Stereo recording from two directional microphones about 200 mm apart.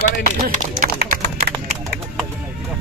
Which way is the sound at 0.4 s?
40° right (ahead or behind).